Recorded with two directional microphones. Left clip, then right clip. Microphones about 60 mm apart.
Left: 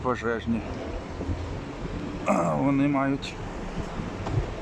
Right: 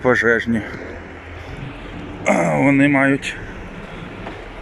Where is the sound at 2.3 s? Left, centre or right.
Right.